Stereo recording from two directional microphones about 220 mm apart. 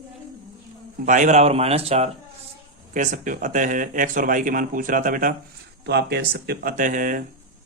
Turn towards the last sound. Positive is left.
turn(degrees=-40)  # may be behind; listen again after turning